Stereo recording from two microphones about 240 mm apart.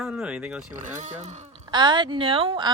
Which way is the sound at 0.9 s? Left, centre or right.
Right.